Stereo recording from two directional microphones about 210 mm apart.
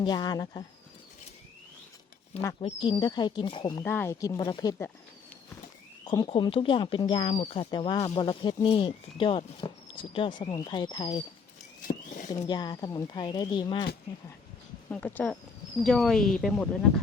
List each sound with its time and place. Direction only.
0.0 s speech: 20° left (ahead or behind)
2.4 s speech: 15° left (ahead or behind)
3.8 s speech: 10° left (ahead or behind)
6.1 s speech: 25° left (ahead or behind)
11.8 s a sound: 40° left (ahead or behind)
12.5 s speech: 20° left (ahead or behind)
14.8 s speech: 10° left (ahead or behind)